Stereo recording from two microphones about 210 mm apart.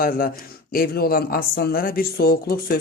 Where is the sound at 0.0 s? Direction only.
45° left (ahead or behind).